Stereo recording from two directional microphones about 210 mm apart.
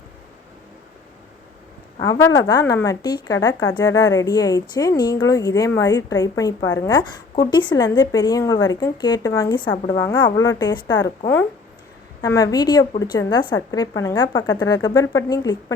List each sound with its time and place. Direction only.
2.0 s a woman's voice: 15° left (ahead or behind)
12.2 s speech: 15° left (ahead or behind)